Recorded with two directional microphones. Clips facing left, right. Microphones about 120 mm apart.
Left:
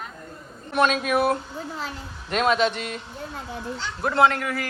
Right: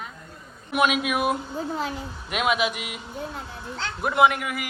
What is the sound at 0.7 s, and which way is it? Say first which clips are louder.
Speech: left 1 dB; 10° right (ahead or behind).